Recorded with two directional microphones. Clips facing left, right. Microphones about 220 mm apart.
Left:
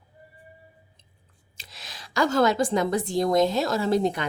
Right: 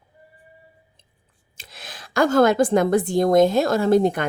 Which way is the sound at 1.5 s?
50° right (ahead or behind).